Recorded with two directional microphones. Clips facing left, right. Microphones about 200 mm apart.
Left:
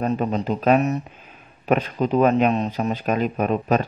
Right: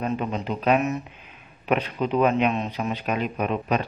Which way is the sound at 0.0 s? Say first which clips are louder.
Left 4 dB; 40° left (ahead or behind).